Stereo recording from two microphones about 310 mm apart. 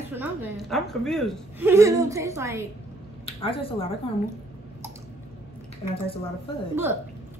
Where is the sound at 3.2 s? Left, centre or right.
Centre.